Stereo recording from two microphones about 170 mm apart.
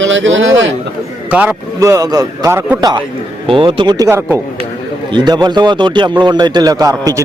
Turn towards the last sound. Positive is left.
turn(degrees=-20)  # may be behind; listen again after turning